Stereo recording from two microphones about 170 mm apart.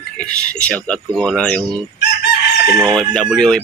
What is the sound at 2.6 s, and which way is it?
Speech, 15° right (ahead or behind).